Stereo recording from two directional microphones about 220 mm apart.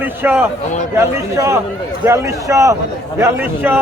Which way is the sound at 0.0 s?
10° right (ahead or behind).